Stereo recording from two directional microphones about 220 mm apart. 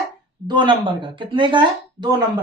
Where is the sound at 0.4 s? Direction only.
20° right (ahead or behind).